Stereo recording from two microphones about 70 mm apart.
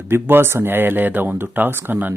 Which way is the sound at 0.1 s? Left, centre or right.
Right.